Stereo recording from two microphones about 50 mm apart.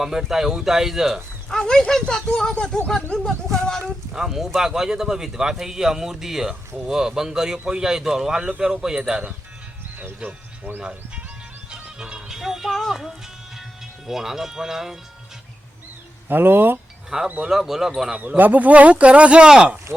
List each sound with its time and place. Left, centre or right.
0.0 s speech: centre
1.5 s speech: centre
4.1 s speech: centre
10.2 s speech: right
10.8 s speech: centre
11.7 s music: centre
12.9 s speech: centre
16.3 s speech: right
17.2 s speech: right
17.5 s speech: centre
18.3 s speech: right; by 19.8 s centre